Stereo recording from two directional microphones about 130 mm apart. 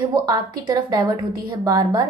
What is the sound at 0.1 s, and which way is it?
A woman's voice, 30° right (ahead or behind).